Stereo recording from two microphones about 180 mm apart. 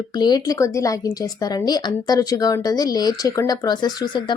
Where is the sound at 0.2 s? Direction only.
20° left (ahead or behind).